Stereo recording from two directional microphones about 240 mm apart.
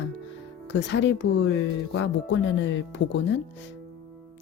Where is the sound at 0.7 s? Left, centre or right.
Left.